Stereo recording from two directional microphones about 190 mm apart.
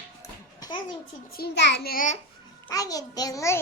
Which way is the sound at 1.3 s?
55° left (ahead or behind).